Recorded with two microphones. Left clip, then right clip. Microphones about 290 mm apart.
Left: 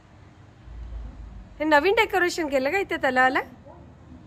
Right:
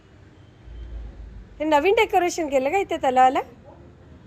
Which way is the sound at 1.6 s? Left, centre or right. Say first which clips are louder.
Right 1 dB; centre.